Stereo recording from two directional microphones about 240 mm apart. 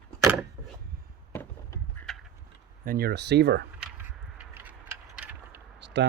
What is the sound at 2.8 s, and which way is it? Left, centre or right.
Speech, right.